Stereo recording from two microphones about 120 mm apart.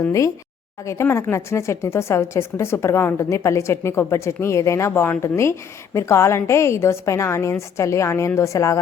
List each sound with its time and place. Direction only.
0.0 s speech: 25° left (ahead or behind)